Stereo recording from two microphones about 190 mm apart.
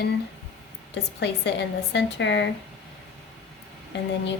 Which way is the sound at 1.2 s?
65° left (ahead or behind).